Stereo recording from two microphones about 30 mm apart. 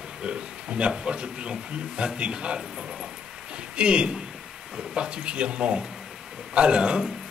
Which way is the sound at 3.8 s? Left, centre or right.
Right.